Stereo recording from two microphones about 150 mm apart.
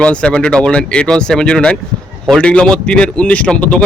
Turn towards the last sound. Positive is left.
turn(degrees=10)  # may be behind; listen again after turning